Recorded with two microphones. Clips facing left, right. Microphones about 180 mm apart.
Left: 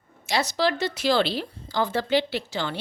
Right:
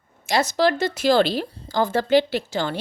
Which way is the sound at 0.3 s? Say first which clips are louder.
Right 4 dB; 50° right (ahead or behind).